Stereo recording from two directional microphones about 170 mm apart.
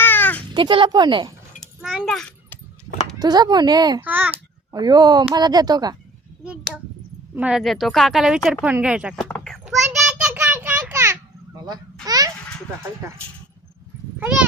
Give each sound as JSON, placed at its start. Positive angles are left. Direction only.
{"t": 0.0, "sound": "a sound", "side_deg": 10}
{"t": 0.5, "sound": "speech", "side_deg": -30}
{"t": 1.6, "sound": "a sound", "side_deg": -5}
{"t": 3.2, "sound": "speech", "side_deg": -25}
{"t": 4.0, "sound": "a child's voice", "side_deg": -10}
{"t": 4.7, "sound": "speech", "side_deg": -25}
{"t": 6.4, "sound": "a sound", "side_deg": -5}
{"t": 7.3, "sound": "speech", "side_deg": -5}
{"t": 9.4, "sound": "child singing", "side_deg": 0}
{"t": 12.0, "sound": "babbling", "side_deg": -20}
{"t": 14.2, "sound": "speech", "side_deg": -10}